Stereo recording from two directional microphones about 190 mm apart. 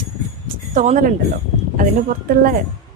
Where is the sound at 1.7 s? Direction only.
45° right (ahead or behind).